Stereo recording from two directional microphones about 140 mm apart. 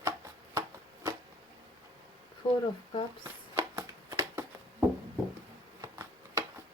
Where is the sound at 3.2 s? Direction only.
20° right (ahead or behind).